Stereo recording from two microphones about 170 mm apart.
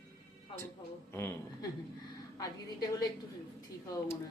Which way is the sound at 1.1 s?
15° left (ahead or behind).